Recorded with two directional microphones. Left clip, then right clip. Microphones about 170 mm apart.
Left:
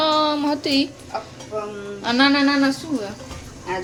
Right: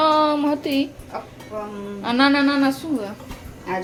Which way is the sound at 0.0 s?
10° right (ahead or behind).